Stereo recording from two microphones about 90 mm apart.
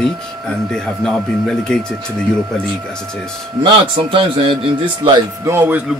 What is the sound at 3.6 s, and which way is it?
Speech, 70° right (ahead or behind).